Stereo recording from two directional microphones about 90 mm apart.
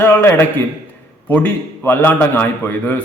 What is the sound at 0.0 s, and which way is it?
A man's voice, 25° left (ahead or behind).